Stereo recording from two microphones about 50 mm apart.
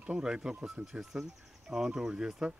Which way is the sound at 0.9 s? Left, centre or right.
Centre.